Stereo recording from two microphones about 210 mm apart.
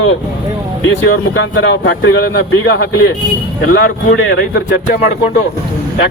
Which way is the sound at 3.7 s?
60° left (ahead or behind).